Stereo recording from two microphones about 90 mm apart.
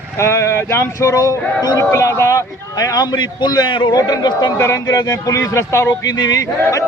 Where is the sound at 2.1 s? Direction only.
30° left (ahead or behind).